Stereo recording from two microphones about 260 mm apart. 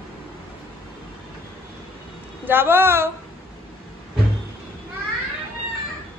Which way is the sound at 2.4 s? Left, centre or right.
Centre.